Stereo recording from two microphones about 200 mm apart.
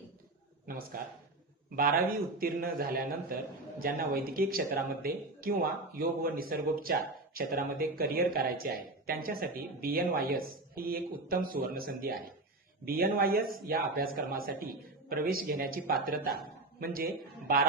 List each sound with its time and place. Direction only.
0.9 s speech: 45° right (ahead or behind)